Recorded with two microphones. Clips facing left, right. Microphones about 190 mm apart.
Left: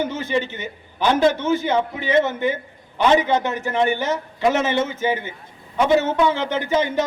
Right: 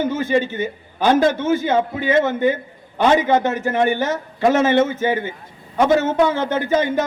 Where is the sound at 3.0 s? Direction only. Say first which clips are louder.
Right 2 dB; 45° right (ahead or behind).